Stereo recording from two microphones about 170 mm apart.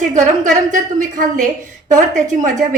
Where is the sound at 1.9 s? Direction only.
45° right (ahead or behind).